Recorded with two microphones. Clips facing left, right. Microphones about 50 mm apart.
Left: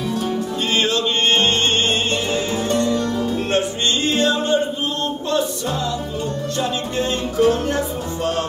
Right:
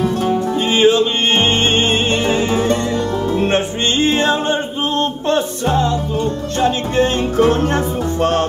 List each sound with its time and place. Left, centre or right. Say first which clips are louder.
0.7 s music: right 7 dB; centre; by 8.5 s right